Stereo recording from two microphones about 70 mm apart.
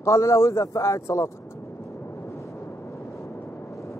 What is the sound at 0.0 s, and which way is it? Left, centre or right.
A man's voice, left.